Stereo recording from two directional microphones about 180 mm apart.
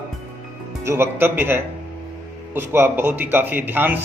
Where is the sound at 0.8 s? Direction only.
15° right (ahead or behind).